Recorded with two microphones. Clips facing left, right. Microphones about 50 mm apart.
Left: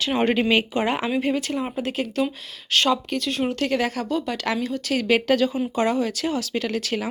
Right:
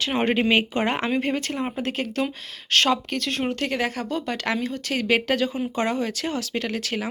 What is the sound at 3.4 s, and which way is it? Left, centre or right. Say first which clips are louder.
Speech: left 3 dB; right.